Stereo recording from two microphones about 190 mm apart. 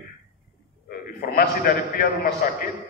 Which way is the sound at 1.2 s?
50° left (ahead or behind).